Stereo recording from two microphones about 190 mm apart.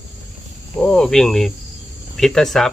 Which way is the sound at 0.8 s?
5° left (ahead or behind).